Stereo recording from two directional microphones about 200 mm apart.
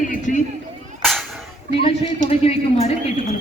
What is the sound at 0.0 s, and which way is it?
Run, 40° left (ahead or behind).